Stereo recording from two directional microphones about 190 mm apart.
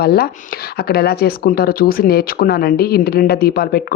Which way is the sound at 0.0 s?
55° left (ahead or behind).